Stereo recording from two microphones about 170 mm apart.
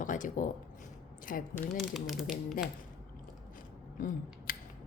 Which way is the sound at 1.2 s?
55° left (ahead or behind).